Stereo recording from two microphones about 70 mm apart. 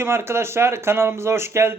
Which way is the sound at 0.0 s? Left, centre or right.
Right.